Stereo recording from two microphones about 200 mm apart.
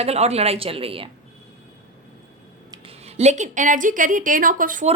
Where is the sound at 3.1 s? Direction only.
35° right (ahead or behind).